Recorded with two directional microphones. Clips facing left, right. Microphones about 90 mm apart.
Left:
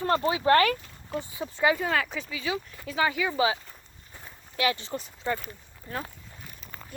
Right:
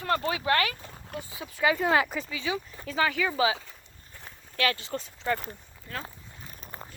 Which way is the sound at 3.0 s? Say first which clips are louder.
Even; 15° left (ahead or behind).